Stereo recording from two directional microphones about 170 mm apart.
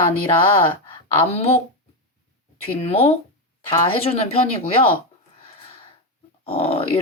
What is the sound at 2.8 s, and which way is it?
Speech, 35° left (ahead or behind).